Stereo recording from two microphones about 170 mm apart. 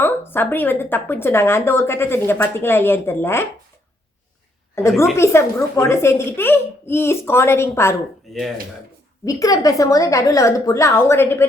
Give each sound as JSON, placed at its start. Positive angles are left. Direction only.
{"t": 0.0, "sound": "speech", "side_deg": 10}
{"t": 4.7, "sound": "a woman's voice", "side_deg": 15}
{"t": 8.3, "sound": "speech", "side_deg": 0}
{"t": 9.2, "sound": "a woman's voice", "side_deg": 20}